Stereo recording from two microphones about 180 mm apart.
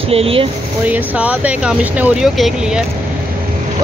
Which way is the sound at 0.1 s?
30° right (ahead or behind).